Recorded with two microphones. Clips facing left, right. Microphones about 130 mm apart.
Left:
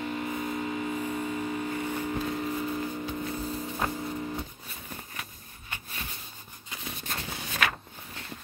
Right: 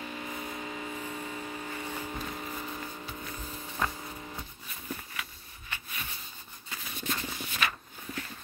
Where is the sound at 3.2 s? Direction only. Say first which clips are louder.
Left 9 dB; 35° left (ahead or behind).